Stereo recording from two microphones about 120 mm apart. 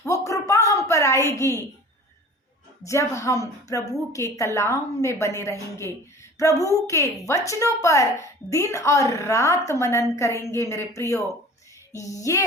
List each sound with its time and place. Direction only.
0.0 s a sound: 25° left (ahead or behind)
1.3 s a woman's voice: 25° left (ahead or behind)
2.8 s a woman's voice: 25° left (ahead or behind)
12.2 s a woman's voice: 25° left (ahead or behind)